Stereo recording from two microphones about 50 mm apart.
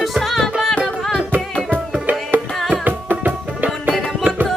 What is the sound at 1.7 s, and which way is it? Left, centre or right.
Music, right.